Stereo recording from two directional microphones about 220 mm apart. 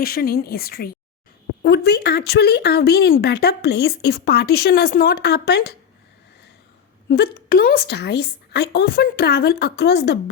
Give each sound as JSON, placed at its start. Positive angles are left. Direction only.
{"t": 0.0, "sound": "speech", "side_deg": 45}
{"t": 7.1, "sound": "speech", "side_deg": 45}